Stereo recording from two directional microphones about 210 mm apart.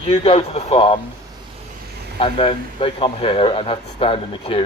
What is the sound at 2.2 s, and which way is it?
A man's voice, 25° left (ahead or behind).